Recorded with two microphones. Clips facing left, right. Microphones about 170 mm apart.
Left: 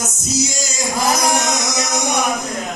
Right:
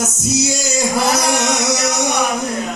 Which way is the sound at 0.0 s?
65° right (ahead or behind).